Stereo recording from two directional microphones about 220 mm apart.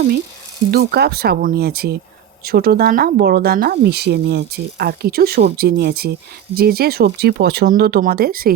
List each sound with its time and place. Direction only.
0.7 s speech: 45° right (ahead or behind)